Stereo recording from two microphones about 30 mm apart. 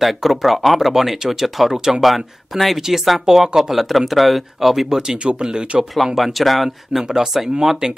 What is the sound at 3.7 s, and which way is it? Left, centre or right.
Speech, centre.